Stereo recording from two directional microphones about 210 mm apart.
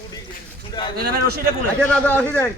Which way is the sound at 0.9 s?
45° right (ahead or behind).